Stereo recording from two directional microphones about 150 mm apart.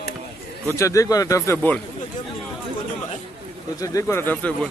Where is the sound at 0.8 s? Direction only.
20° left (ahead or behind).